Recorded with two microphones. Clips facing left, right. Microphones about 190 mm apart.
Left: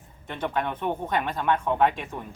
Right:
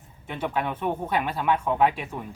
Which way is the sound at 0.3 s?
5° right (ahead or behind).